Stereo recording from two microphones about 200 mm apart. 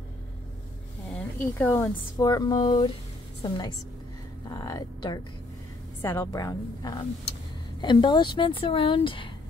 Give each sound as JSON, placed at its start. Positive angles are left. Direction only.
{"t": 1.0, "sound": "a woman's voice", "side_deg": 5}
{"t": 4.5, "sound": "a sound", "side_deg": 20}
{"t": 6.0, "sound": "a woman's voice", "side_deg": 15}